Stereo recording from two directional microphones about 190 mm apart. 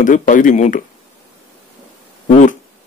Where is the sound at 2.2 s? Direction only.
40° left (ahead or behind).